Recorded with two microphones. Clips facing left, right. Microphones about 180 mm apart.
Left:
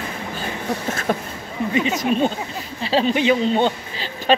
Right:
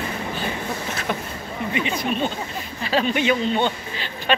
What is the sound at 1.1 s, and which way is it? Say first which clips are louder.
Speech: left 3 dB; 40° left (ahead or behind).